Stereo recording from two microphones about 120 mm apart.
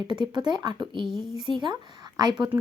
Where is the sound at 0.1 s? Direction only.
40° right (ahead or behind).